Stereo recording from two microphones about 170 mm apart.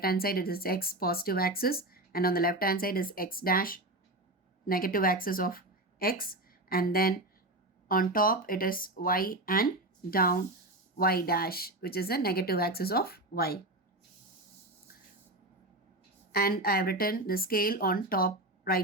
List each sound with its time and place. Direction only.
0.0 s a woman's voice: 60° left (ahead or behind)
16.3 s speech: 65° left (ahead or behind)